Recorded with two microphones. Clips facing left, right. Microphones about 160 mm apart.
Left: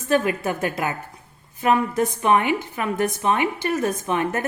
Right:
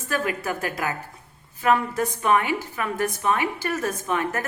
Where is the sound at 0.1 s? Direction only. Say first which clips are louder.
Left 5 dB; 25° left (ahead or behind).